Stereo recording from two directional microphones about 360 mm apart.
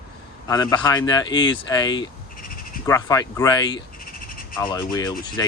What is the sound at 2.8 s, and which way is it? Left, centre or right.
Speech, centre.